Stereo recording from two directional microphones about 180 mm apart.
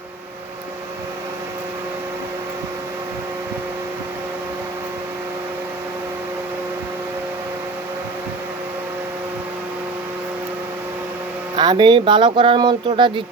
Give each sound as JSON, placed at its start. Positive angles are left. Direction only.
{"t": 11.5, "sound": "speech", "side_deg": -25}